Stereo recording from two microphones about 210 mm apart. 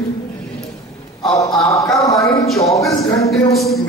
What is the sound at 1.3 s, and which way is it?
Speech, 15° left (ahead or behind).